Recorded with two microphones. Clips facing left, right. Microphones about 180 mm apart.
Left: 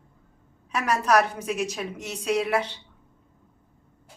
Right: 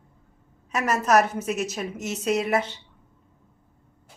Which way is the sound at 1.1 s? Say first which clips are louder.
Right 2 dB; 5° right (ahead or behind).